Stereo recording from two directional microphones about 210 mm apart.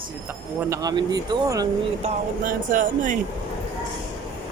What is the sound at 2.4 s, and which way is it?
Speech, 40° right (ahead or behind).